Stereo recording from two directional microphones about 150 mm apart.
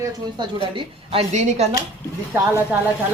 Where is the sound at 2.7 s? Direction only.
10° right (ahead or behind).